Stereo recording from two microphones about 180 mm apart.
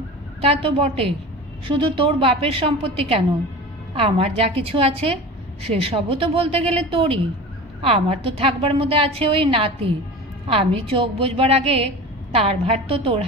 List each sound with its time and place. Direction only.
0.4 s a woman's voice: 35° right (ahead or behind)